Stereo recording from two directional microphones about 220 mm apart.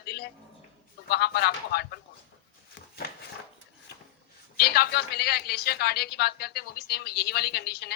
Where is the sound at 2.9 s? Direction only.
45° left (ahead or behind).